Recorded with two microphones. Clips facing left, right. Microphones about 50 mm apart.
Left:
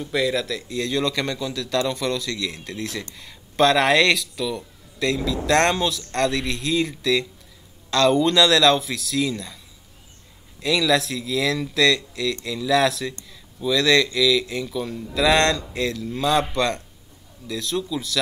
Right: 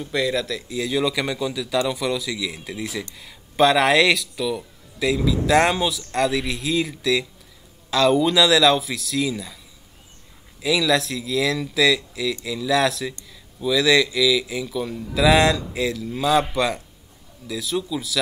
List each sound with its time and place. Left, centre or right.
0.0 s speech: centre
10.6 s speech: centre